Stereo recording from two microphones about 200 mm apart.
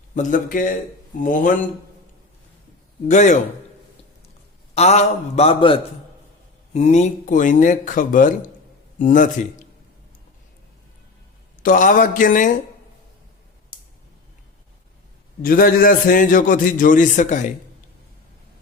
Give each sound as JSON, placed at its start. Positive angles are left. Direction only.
{"t": 0.1, "sound": "speech", "side_deg": 40}
{"t": 3.1, "sound": "speech", "side_deg": 35}
{"t": 4.7, "sound": "speech", "side_deg": 35}
{"t": 11.6, "sound": "speech", "side_deg": 40}
{"t": 15.4, "sound": "a man's voice", "side_deg": 45}